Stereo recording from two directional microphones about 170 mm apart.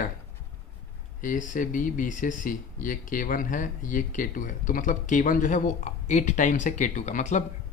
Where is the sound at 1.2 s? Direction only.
50° left (ahead or behind).